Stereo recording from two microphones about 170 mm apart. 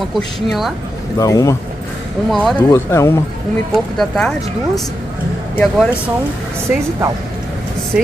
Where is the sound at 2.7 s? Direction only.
15° left (ahead or behind).